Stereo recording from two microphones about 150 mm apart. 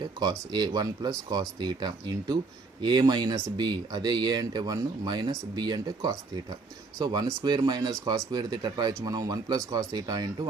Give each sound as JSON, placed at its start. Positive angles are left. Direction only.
{"t": 0.2, "sound": "speech", "side_deg": -30}